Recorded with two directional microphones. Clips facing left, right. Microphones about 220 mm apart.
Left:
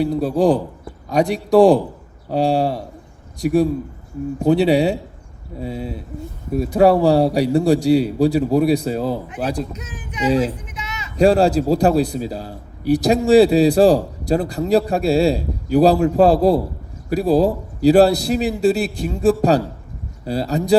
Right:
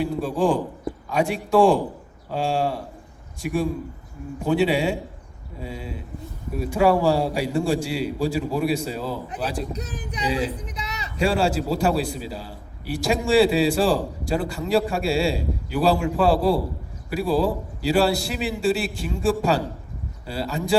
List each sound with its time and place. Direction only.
0.0 s a man's voice: 40° left (ahead or behind)
9.7 s speech: 35° right (ahead or behind)
10.4 s a sound: 35° right (ahead or behind)
11.2 s a man's voice: 40° left (ahead or behind)